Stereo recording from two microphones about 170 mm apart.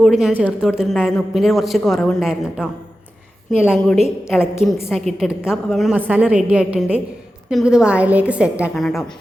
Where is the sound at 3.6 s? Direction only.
Centre (ahead or behind).